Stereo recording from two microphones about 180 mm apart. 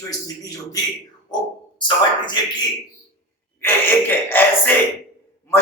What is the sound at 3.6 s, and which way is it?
Speech, 10° left (ahead or behind).